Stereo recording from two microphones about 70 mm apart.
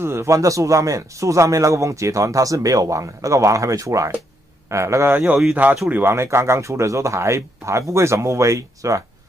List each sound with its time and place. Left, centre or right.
0.0 s speech: right
5.1 s speech: right
6.1 s speech: right